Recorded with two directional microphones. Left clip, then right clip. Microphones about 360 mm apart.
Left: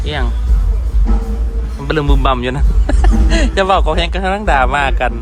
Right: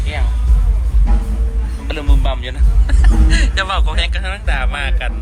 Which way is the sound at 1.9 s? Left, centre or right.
Left.